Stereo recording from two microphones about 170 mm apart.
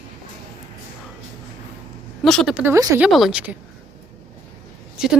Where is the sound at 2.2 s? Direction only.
Centre (ahead or behind).